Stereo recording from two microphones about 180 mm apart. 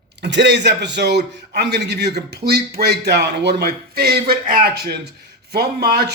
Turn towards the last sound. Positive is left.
turn(degrees=-60)  # may be behind; listen again after turning